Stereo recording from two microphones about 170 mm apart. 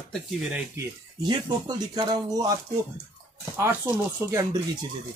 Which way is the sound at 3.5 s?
15° right (ahead or behind).